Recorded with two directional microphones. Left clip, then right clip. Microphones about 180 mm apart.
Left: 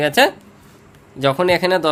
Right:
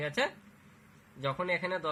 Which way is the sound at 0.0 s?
45° left (ahead or behind).